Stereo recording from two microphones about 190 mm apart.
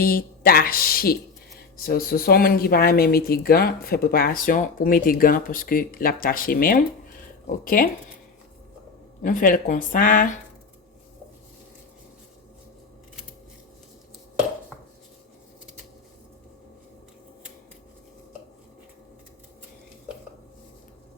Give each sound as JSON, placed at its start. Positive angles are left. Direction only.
{"t": 0.0, "sound": "speech", "side_deg": 50}
{"t": 9.2, "sound": "speech", "side_deg": 45}